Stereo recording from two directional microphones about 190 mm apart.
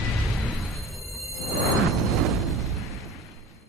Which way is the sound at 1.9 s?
Centre (ahead or behind).